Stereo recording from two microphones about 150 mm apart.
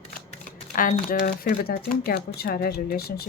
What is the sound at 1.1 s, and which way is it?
Speech, 85° left.